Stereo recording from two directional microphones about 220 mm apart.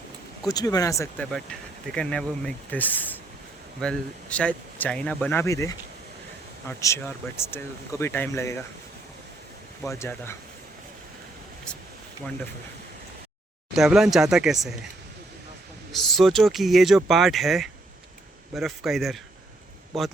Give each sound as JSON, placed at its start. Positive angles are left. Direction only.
{"t": 0.4, "sound": "speech", "side_deg": 15}
{"t": 1.3, "sound": "speech", "side_deg": 0}
{"t": 9.8, "sound": "speech", "side_deg": 15}
{"t": 13.7, "sound": "speech", "side_deg": 0}
{"t": 15.9, "sound": "speech", "side_deg": 0}